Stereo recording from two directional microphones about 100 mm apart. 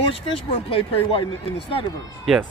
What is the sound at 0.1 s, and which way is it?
Speech, 70° left (ahead or behind).